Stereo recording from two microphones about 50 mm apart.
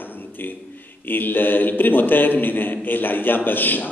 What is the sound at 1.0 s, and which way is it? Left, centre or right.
A man's voice, left.